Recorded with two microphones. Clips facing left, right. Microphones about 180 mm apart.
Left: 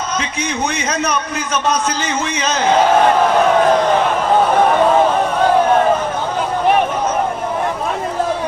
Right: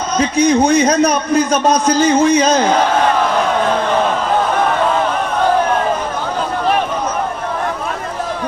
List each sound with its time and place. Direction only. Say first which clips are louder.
0.2 s a man's voice: right 9 dB; 35° right (ahead or behind)